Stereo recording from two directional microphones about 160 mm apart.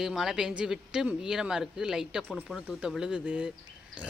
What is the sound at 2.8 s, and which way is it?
Speech, 5° right (ahead or behind).